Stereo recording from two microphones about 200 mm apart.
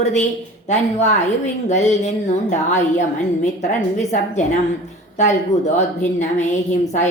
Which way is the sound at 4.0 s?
35° left (ahead or behind).